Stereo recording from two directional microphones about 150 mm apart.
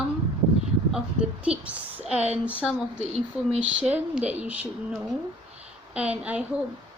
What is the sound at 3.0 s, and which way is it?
Speech, 45° right (ahead or behind).